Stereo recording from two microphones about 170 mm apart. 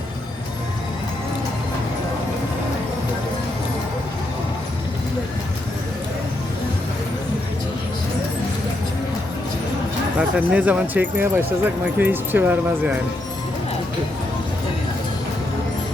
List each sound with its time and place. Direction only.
10.2 s speech: 5° right (ahead or behind)